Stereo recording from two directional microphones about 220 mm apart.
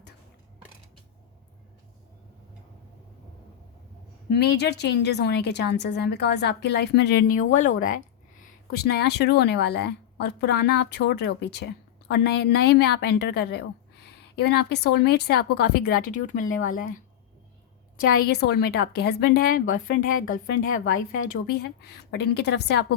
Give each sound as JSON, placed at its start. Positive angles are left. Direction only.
{"t": 4.3, "sound": "a woman's voice", "side_deg": 50}
{"t": 17.9, "sound": "a woman's voice", "side_deg": 40}